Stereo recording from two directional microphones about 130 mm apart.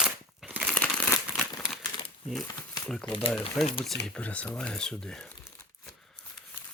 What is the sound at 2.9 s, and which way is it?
Speech, 5° left (ahead or behind).